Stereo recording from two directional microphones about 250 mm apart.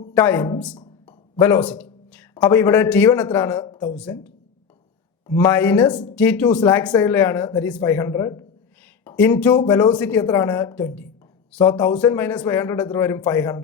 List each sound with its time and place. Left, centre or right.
0.1 s a man's voice: centre